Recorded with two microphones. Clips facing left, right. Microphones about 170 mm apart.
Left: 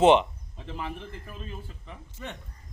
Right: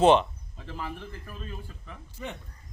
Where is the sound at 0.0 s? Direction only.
20° left (ahead or behind).